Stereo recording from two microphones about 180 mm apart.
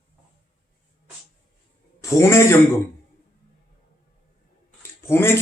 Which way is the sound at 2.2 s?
15° left (ahead or behind).